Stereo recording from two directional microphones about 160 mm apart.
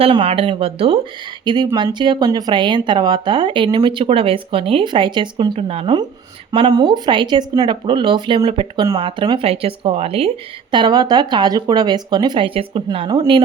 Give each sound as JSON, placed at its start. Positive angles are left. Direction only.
{"t": 0.0, "sound": "speech", "side_deg": -35}
{"t": 1.5, "sound": "speech", "side_deg": -25}